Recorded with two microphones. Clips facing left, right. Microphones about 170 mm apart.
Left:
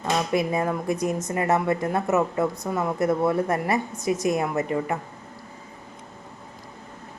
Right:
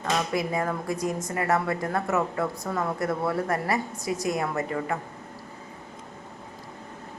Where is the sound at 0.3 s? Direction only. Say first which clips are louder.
Left 3 dB; 20° left (ahead or behind).